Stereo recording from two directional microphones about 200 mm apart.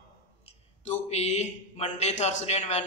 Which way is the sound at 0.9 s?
35° left (ahead or behind).